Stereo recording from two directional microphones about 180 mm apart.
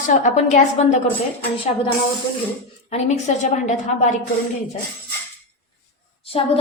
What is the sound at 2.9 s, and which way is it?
Speech, 40° left (ahead or behind).